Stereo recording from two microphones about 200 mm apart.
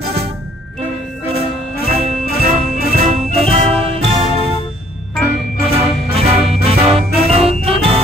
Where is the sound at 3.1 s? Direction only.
30° right (ahead or behind).